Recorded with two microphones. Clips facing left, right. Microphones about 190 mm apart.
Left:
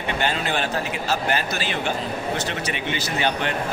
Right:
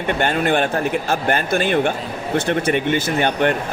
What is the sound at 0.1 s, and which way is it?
Speech, 55° right (ahead or behind).